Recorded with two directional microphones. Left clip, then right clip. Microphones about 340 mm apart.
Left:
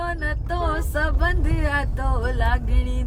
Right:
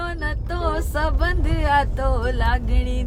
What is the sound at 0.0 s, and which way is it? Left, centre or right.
Speech, centre.